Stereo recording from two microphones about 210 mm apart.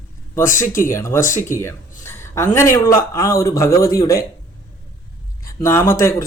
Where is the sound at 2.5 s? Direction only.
15° left (ahead or behind).